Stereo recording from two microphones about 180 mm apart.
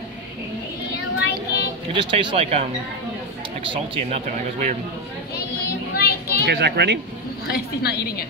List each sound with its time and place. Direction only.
0.9 s child singing: 70° left (ahead or behind)
2.0 s speech: 25° right (ahead or behind)
3.7 s speech: 35° right (ahead or behind)
5.9 s children playing: 60° left (ahead or behind)
6.4 s speech: 65° right (ahead or behind)
7.4 s a woman's voice: 60° left (ahead or behind)